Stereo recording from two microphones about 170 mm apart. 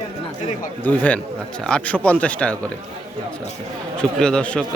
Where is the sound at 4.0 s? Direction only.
5° left (ahead or behind).